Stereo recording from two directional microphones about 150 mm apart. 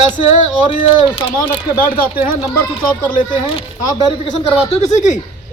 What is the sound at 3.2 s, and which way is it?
A man's voice, 35° left (ahead or behind).